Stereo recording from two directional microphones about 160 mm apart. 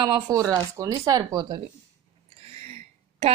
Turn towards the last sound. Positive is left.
turn(degrees=-40)  # may be behind; listen again after turning